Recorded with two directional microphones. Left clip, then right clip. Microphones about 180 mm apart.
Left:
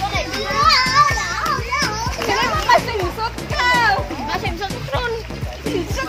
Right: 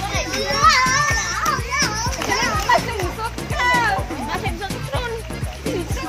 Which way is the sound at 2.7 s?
40° left (ahead or behind).